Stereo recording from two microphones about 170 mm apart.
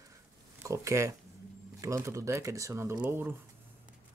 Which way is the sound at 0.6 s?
15° right (ahead or behind).